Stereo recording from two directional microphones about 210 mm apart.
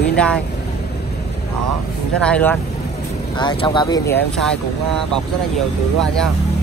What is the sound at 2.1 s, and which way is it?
Speech, 5° left (ahead or behind).